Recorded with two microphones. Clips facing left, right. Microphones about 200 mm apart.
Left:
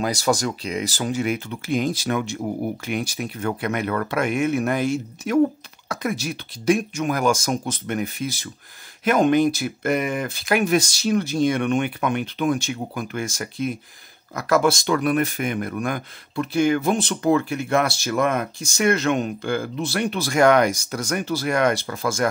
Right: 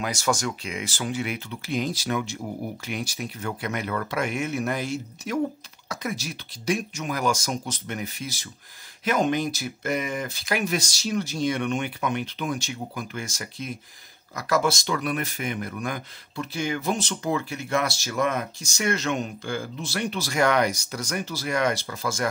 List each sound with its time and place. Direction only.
0.0 s speech: 35° left (ahead or behind); by 22.3 s 55° left (ahead or behind)